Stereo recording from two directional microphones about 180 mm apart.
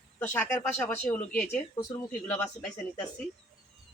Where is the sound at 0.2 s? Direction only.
10° left (ahead or behind).